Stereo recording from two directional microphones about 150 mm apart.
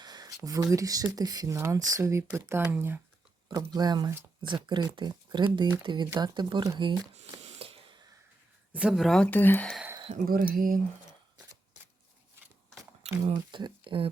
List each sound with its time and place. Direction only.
0.0 s speech: 25° right (ahead or behind)
3.7 s speech: 25° right (ahead or behind)
7.4 s a sound: 40° right (ahead or behind)
8.7 s speech: 5° right (ahead or behind); by 9.7 s 10° left (ahead or behind)
10.2 s speech: 70° right (ahead or behind)
13.0 s a sound: 45° right (ahead or behind)
13.3 s speech: 30° right (ahead or behind)